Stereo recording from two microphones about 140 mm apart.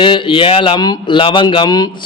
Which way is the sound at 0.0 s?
35° left (ahead or behind).